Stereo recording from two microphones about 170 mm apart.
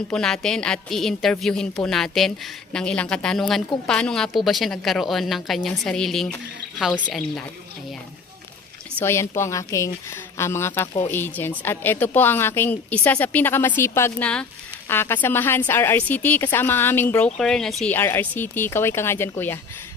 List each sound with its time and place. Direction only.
0.1 s a woman's voice: 5° left (ahead or behind)
9.0 s a woman's voice: 15° left (ahead or behind)